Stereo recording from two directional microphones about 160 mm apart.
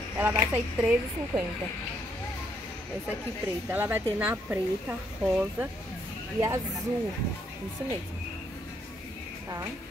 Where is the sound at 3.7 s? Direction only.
10° right (ahead or behind).